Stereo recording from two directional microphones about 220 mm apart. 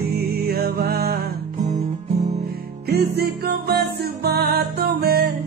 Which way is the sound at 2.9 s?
45° right (ahead or behind).